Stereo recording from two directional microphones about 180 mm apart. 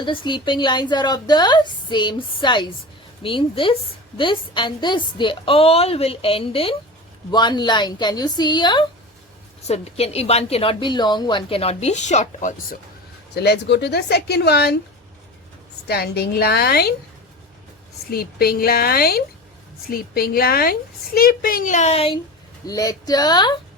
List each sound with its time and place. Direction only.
0.0 s a woman's voice: 25° left (ahead or behind)
9.6 s a woman's voice: 35° left (ahead or behind)
13.3 s speech: 65° left (ahead or behind)
15.9 s speech: 60° left (ahead or behind)
18.1 s speech: 60° left (ahead or behind); by 22.2 s 30° left (ahead or behind)
22.6 s a woman's voice: 20° left (ahead or behind)